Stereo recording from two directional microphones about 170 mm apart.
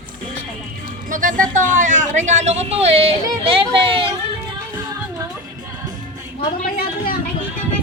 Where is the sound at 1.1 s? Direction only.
50° right (ahead or behind).